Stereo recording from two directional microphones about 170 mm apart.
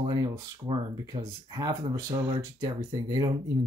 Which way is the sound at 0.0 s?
30° right (ahead or behind).